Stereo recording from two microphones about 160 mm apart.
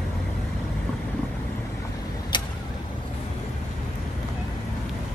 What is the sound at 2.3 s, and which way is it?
Vehicle, 30° left (ahead or behind).